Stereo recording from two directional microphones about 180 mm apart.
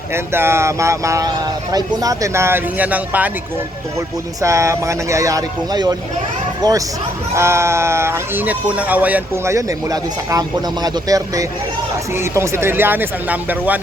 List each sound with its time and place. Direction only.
0.1 s speech: 15° right (ahead or behind)
4.4 s speech: 15° right (ahead or behind)